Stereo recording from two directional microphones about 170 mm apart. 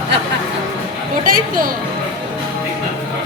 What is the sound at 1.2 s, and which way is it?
Speech, 55° right (ahead or behind).